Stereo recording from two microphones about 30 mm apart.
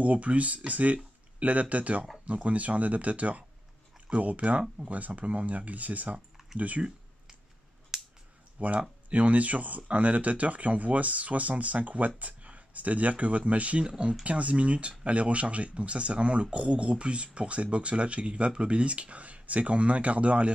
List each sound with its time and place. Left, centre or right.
0.0 s speech: right
7.9 s a sound: centre
8.5 s speech: right
13.8 s speech: right
14.2 s speech: right